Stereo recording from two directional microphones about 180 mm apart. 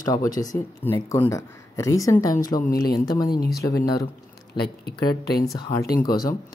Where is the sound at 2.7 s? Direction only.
60° left (ahead or behind).